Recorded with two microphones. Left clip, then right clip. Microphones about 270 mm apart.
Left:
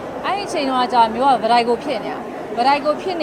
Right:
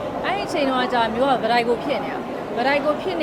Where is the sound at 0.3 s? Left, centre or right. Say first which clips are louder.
Left 2 dB; centre.